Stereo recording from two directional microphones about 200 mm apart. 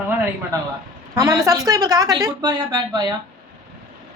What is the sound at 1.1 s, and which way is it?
Speech, 15° right (ahead or behind).